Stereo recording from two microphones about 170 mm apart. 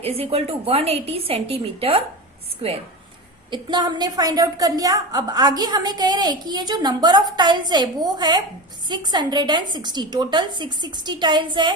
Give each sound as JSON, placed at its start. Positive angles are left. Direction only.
{"t": 0.0, "sound": "a woman's voice", "side_deg": -35}
{"t": 3.5, "sound": "a woman's voice", "side_deg": -25}